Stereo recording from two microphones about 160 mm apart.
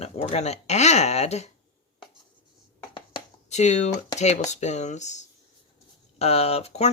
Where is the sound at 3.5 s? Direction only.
45° left (ahead or behind).